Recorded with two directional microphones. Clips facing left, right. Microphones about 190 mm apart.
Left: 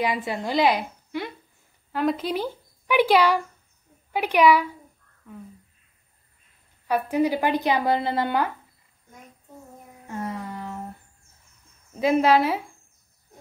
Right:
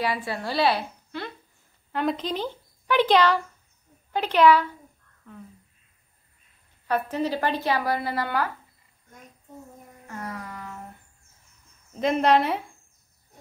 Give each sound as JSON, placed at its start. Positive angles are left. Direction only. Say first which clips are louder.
{"t": 0.0, "sound": "a woman's voice", "louder": "left 2 dB", "side_deg": 20}
{"t": 1.9, "sound": "a woman's voice", "louder": "left 2 dB", "side_deg": 0}
{"t": 6.9, "sound": "speech", "louder": "left 3 dB", "side_deg": 10}
{"t": 10.0, "sound": "a sound", "louder": "left 5 dB", "side_deg": 25}
{"t": 11.9, "sound": "speech", "louder": "left 2 dB", "side_deg": 5}